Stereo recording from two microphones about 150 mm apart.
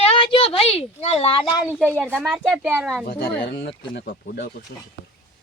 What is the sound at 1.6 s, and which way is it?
A child's voice, 5° right (ahead or behind).